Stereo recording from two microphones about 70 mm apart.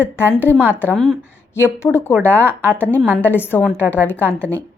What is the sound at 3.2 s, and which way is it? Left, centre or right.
Speech, left.